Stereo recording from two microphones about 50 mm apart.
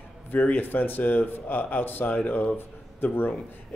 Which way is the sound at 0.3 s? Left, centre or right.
Left.